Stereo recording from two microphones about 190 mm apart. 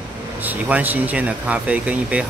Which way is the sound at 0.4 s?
10° right (ahead or behind).